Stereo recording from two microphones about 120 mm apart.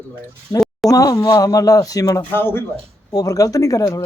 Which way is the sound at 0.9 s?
30° left (ahead or behind).